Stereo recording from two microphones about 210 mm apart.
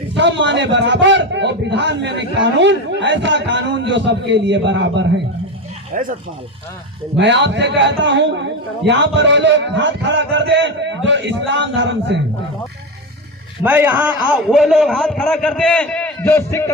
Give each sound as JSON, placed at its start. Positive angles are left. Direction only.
{"t": 0.1, "sound": "a man's voice", "side_deg": -60}
{"t": 5.9, "sound": "speech", "side_deg": -40}
{"t": 7.2, "sound": "a man's voice", "side_deg": -55}
{"t": 13.7, "sound": "a man's voice", "side_deg": -10}